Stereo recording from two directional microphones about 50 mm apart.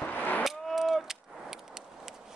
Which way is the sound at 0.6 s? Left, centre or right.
Centre.